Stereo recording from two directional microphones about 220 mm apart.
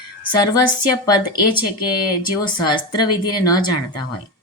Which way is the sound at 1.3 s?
20° left (ahead or behind).